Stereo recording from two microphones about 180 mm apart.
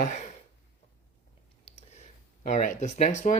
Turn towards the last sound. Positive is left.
turn(degrees=40)  # may be behind; listen again after turning